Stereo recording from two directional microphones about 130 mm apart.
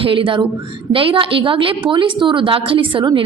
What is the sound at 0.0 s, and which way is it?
A woman's voice, 45° right (ahead or behind).